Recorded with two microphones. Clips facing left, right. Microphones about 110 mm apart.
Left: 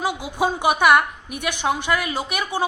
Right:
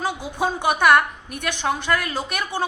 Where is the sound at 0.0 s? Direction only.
10° left (ahead or behind).